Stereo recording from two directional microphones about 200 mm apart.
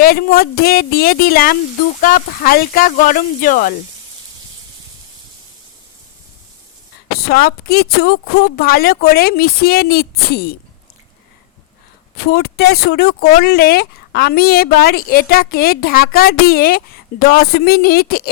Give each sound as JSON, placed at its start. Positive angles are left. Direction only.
{"t": 0.0, "sound": "a woman's voice", "side_deg": 50}
{"t": 7.2, "sound": "a woman's voice", "side_deg": 50}
{"t": 12.3, "sound": "a woman's voice", "side_deg": 50}